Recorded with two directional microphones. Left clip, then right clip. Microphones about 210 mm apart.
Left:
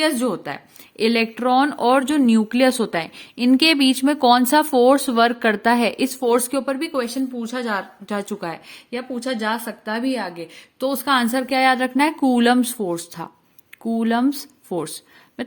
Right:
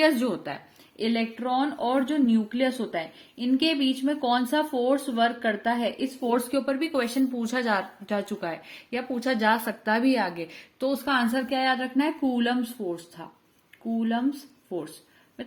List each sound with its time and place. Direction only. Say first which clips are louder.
0.2 s speech: left 5 dB; 30° left (ahead or behind)
0.9 s speech: left 9 dB; 50° left (ahead or behind); by 7.9 s 10° left (ahead or behind)
8.0 s speech: left 3 dB; 25° left (ahead or behind)
8.9 s a woman's voice: left 2 dB; 10° left (ahead or behind)
10.8 s speech: left 6 dB; 35° left (ahead or behind); by 14.8 s 60° left (ahead or behind)